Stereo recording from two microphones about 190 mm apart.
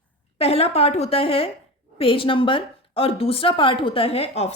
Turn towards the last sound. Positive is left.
turn(degrees=35)  # may be behind; listen again after turning